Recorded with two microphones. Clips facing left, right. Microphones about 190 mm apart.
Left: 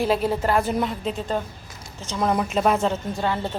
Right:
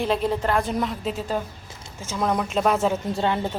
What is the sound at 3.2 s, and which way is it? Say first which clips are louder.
Speech: right 1 dB; 15° right (ahead or behind).